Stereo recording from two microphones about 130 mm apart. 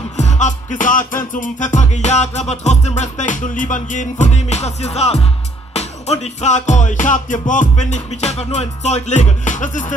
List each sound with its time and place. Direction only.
0.2 s music: 65° left (ahead or behind)
3.0 s music: 70° left (ahead or behind)